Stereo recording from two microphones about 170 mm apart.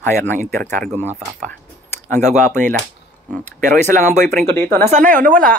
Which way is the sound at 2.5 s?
50° right (ahead or behind).